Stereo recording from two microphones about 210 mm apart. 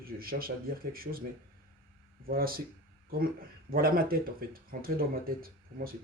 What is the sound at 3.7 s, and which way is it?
Speech, 45° right (ahead or behind).